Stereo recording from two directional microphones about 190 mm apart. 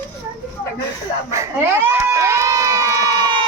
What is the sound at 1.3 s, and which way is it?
Crowd, 15° right (ahead or behind).